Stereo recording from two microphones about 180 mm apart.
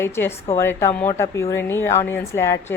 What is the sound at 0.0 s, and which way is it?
A woman's voice, 15° left (ahead or behind).